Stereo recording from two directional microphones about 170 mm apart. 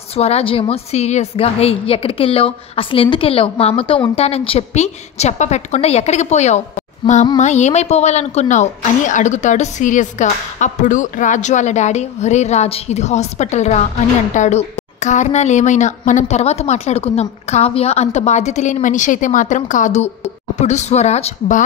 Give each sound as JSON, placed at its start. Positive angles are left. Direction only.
{"t": 0.1, "sound": "a woman's voice", "side_deg": 35}